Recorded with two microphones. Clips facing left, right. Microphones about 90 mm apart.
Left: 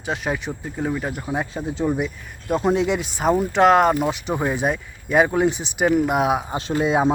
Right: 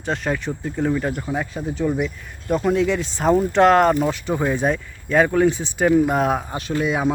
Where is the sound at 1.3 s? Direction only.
20° left (ahead or behind).